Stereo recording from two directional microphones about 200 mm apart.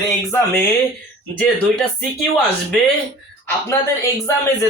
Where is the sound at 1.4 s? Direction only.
5° left (ahead or behind).